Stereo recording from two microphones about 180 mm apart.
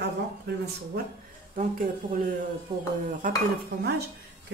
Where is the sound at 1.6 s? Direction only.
45° right (ahead or behind).